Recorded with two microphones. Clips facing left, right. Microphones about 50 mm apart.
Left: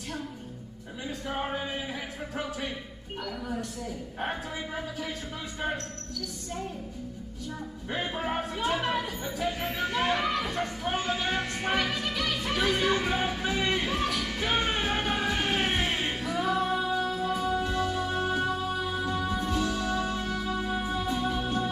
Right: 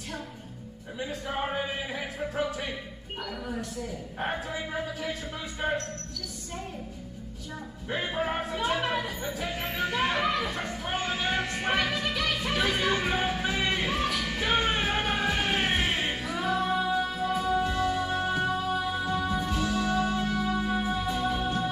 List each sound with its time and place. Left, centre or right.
1.2 s speech: centre
4.2 s speech: centre
7.9 s speech: centre
9.4 s music: right
16.5 s music: centre
16.9 s music: right